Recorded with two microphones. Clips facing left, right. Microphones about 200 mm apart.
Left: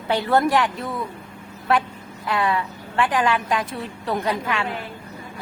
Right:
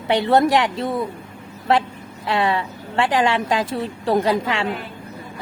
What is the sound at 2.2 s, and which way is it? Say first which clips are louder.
A woman's voice: right 2 dB; 25° right (ahead or behind).